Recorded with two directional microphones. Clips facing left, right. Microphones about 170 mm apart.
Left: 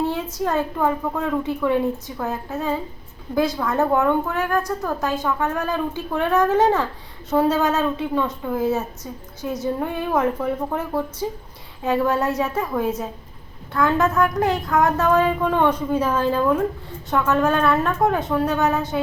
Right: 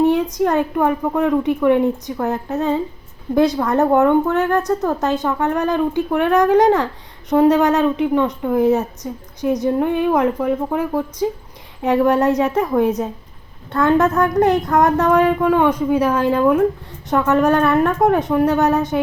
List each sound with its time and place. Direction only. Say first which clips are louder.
0.0 s a woman's voice: right 8 dB; 20° right (ahead or behind)